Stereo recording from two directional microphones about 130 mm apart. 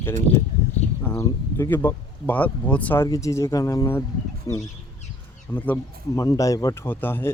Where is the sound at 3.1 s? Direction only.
25° left (ahead or behind).